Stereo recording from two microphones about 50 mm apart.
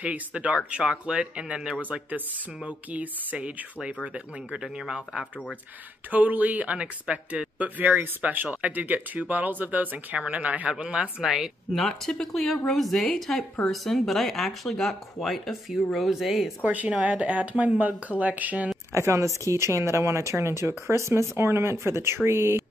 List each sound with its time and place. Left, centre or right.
0.0 s speech: right
1.8 s speech: right
6.1 s speech: right
10.7 s speech: centre
11.7 s speech: centre
16.6 s speech: right
18.9 s speech: right